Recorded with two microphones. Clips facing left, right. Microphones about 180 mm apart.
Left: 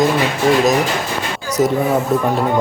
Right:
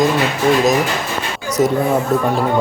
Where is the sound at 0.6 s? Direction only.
Centre (ahead or behind).